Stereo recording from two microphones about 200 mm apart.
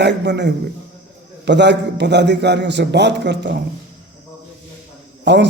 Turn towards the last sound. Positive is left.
turn(degrees=-60)  # may be behind; listen again after turning